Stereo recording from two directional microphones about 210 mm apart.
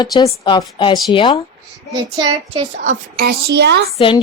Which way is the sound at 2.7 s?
45° right (ahead or behind).